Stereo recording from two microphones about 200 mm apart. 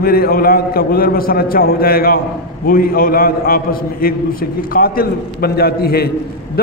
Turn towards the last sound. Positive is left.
turn(degrees=50)  # may be behind; listen again after turning